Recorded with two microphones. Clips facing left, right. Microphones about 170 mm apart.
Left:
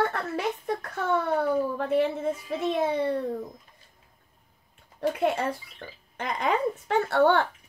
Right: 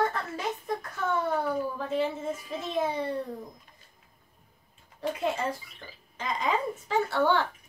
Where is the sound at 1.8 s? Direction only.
65° left (ahead or behind).